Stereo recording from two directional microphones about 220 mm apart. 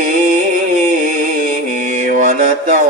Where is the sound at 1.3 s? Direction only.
35° right (ahead or behind).